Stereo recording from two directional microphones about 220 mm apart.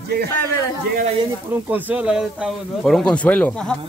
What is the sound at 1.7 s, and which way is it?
Speech, 5° right (ahead or behind).